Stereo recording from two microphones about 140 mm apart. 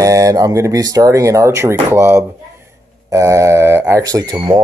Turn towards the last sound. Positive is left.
turn(degrees=-25)  # may be behind; listen again after turning